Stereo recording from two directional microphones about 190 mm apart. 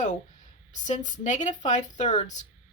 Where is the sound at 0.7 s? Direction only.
40° left (ahead or behind).